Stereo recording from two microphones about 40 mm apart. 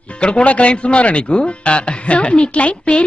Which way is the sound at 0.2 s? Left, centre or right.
Left.